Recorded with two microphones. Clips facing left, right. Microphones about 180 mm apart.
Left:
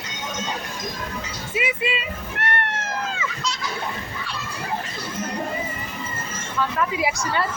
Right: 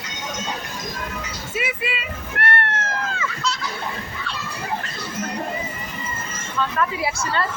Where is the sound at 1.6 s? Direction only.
20° left (ahead or behind).